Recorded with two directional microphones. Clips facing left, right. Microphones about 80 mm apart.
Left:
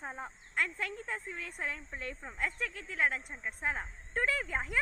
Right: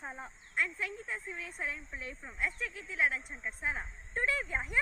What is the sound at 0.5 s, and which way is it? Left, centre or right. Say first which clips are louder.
Speech: even; left.